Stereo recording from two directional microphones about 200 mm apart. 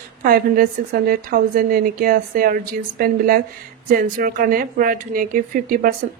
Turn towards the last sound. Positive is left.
turn(degrees=-45)  # may be behind; listen again after turning